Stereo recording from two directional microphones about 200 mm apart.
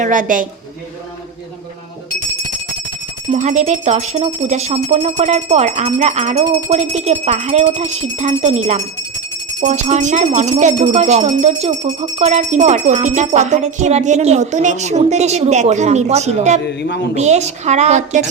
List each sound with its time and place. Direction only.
0.0 s speech: 40° right (ahead or behind)
3.3 s speech: 35° right (ahead or behind)
16.6 s a man's voice: 55° left (ahead or behind)
17.2 s speech: 35° right (ahead or behind)